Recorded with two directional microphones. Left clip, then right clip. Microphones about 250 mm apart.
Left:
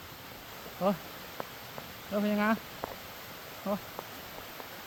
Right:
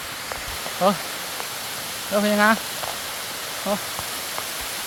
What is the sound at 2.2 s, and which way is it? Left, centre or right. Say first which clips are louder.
Speech: right 12 dB; centre.